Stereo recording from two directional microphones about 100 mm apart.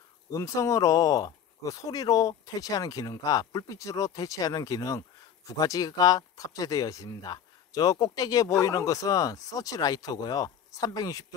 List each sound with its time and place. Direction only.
0.3 s speech: 35° left (ahead or behind)